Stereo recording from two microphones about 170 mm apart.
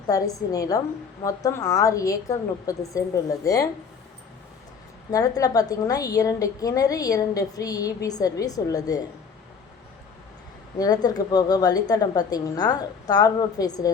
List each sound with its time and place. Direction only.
0.1 s a woman's voice: 20° left (ahead or behind)
5.1 s a woman's voice: 20° left (ahead or behind)
10.8 s a woman's voice: 25° left (ahead or behind)